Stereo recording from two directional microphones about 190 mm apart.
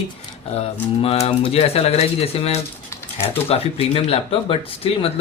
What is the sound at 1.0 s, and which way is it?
Speech, 30° left (ahead or behind).